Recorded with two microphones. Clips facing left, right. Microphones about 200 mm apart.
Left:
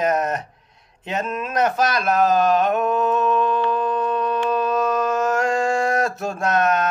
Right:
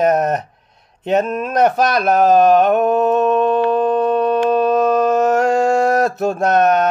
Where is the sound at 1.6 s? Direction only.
65° right (ahead or behind).